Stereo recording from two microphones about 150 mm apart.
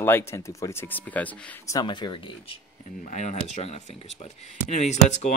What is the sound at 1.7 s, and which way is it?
Speech, 30° left (ahead or behind).